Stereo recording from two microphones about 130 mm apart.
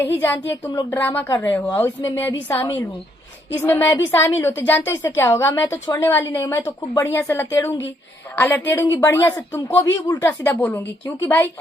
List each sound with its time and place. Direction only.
0.0 s speech: 15° left (ahead or behind)
3.6 s a woman's voice: 15° left (ahead or behind)